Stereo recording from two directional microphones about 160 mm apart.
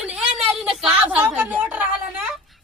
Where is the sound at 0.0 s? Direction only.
5° right (ahead or behind).